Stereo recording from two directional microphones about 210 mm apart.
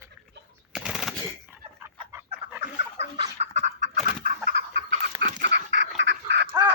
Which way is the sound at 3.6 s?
35° right (ahead or behind).